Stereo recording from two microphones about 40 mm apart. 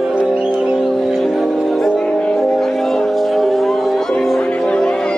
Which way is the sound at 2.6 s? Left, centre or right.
Centre.